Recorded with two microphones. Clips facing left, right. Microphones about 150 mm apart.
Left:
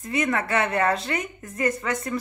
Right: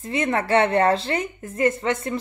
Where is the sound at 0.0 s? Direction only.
25° right (ahead or behind).